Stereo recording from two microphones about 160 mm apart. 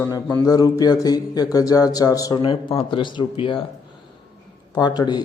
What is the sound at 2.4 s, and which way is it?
Speech, 35° left (ahead or behind).